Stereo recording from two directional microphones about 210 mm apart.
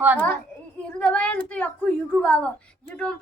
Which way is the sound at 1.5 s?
5° left (ahead or behind).